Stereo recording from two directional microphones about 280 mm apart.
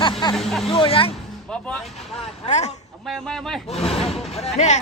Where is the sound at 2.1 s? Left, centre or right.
Left.